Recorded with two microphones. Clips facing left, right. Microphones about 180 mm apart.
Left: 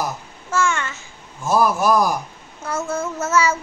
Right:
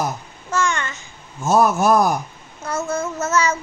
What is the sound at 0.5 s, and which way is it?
Speech, 5° left (ahead or behind).